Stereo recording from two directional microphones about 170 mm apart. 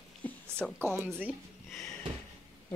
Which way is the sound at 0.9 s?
10° right (ahead or behind).